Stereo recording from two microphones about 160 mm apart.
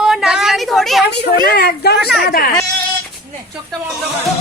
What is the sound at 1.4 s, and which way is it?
A woman's voice, 75° left (ahead or behind).